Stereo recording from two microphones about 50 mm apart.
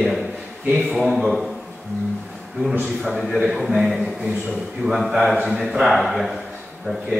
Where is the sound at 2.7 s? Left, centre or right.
Centre.